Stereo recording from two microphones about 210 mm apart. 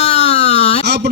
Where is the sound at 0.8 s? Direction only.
55° right (ahead or behind).